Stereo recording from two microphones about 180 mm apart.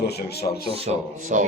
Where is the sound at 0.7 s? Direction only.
35° right (ahead or behind).